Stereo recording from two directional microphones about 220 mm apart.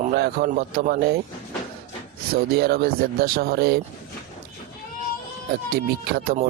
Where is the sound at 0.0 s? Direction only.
45° right (ahead or behind).